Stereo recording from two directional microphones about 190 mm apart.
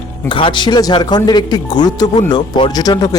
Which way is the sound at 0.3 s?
25° left (ahead or behind).